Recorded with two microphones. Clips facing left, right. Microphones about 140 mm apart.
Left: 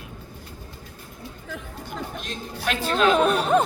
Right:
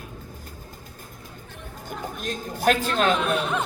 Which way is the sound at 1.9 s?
45° right (ahead or behind).